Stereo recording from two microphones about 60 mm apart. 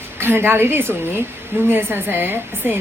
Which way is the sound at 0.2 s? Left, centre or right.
Right.